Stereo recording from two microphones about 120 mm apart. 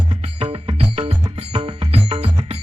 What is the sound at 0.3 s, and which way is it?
Music, 60° right (ahead or behind).